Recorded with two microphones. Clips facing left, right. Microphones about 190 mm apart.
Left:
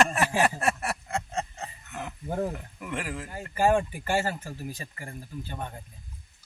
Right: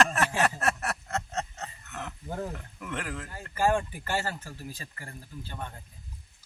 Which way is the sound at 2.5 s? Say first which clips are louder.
Left 2 dB; 10° left (ahead or behind).